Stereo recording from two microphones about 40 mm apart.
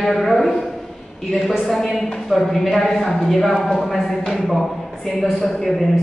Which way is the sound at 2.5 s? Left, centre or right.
Centre.